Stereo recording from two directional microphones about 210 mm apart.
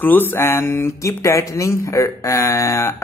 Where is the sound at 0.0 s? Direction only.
10° left (ahead or behind).